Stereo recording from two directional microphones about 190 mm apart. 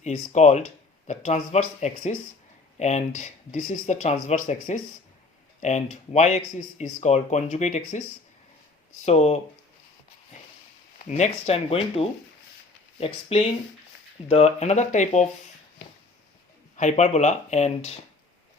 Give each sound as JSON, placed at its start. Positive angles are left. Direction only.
{"t": 0.0, "sound": "speech", "side_deg": 35}
{"t": 9.0, "sound": "speech", "side_deg": 35}
{"t": 11.0, "sound": "speech", "side_deg": 35}
{"t": 16.7, "sound": "speech", "side_deg": 40}